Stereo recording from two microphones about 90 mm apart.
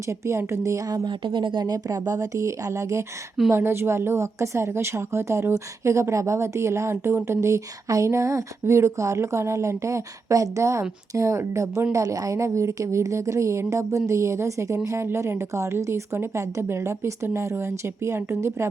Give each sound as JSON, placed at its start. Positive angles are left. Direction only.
{"t": 0.3, "sound": "a woman's voice", "side_deg": -30}
{"t": 1.0, "sound": "a woman's voice", "side_deg": -60}